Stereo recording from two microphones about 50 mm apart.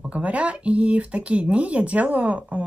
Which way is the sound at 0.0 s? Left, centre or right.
Right.